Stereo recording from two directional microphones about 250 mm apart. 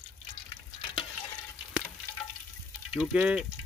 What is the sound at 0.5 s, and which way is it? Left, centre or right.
Stir, left.